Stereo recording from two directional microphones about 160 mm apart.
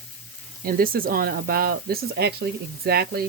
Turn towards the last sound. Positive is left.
turn(degrees=-75)  # may be behind; listen again after turning